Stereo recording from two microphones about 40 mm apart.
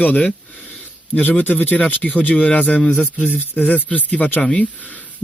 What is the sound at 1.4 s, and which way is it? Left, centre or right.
Speech, left.